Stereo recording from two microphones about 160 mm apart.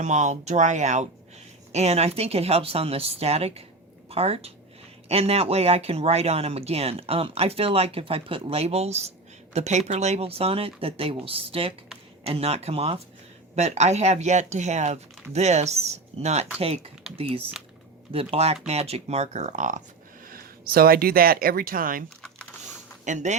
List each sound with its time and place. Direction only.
0.0 s speech: 50° right (ahead or behind)
20.2 s speech: 65° right (ahead or behind)
23.0 s speech: 50° right (ahead or behind)